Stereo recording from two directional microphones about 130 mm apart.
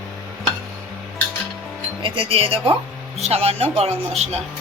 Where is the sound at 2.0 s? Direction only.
40° right (ahead or behind).